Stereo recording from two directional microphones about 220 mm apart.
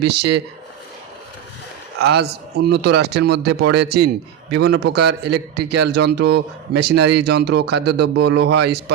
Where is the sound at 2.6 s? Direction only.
50° right (ahead or behind).